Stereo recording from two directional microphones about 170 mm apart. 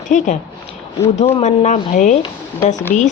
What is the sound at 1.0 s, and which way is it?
Speech, 40° left (ahead or behind).